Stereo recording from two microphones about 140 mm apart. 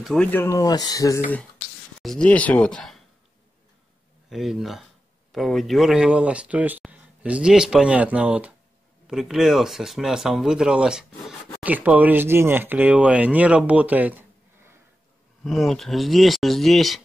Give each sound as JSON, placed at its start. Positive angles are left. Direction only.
{"t": 0.0, "sound": "speech", "side_deg": 5}
{"t": 0.3, "sound": "speech", "side_deg": 15}
{"t": 0.6, "sound": "speech", "side_deg": 30}
{"t": 2.0, "sound": "speech", "side_deg": 5}
{"t": 4.3, "sound": "speech", "side_deg": 0}
{"t": 15.4, "sound": "speech", "side_deg": 0}